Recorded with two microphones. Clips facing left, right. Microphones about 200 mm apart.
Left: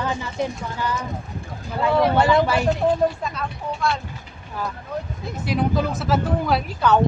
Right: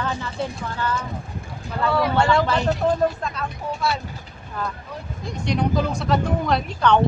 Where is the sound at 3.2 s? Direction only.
Centre (ahead or behind).